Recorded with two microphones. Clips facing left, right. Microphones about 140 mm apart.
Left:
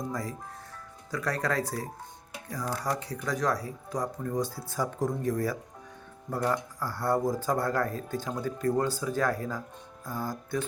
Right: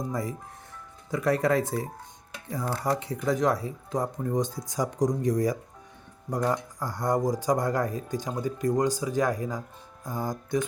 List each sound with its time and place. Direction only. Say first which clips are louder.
0.1 s speech: right 3 dB; 25° right (ahead or behind)